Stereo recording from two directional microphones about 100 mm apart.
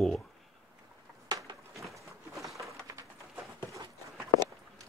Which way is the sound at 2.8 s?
35° right (ahead or behind).